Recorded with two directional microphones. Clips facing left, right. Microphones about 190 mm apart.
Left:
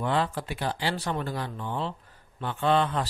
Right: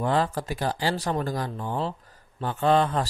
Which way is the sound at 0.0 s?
40° right (ahead or behind).